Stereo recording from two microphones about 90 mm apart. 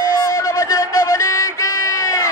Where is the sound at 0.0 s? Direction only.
35° left (ahead or behind).